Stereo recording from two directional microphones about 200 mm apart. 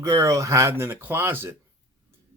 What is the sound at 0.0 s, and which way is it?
Speech, 15° right (ahead or behind).